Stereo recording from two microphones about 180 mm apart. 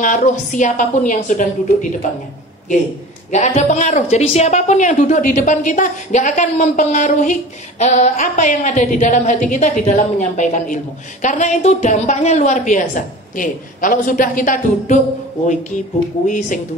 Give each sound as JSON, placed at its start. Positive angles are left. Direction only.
{"t": 0.0, "sound": "a woman's voice", "side_deg": 45}
{"t": 3.3, "sound": "a woman's voice", "side_deg": 40}
{"t": 16.3, "sound": "a woman's voice", "side_deg": 45}